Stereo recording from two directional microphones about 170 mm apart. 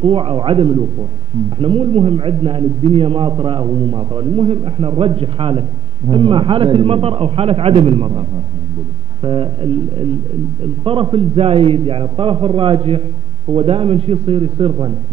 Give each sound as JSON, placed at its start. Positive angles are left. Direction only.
{"t": 0.0, "sound": "a man's voice", "side_deg": -35}